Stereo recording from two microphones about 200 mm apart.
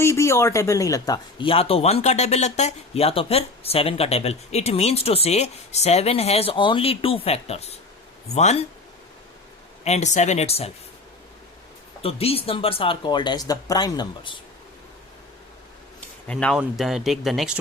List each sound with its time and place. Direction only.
0.0 s speech: 15° left (ahead or behind); by 8.6 s 35° left (ahead or behind)
9.8 s speech: 35° left (ahead or behind)
12.0 s speech: 30° left (ahead or behind)
16.0 s a sound: 5° left (ahead or behind)
16.6 s speech: centre (ahead or behind)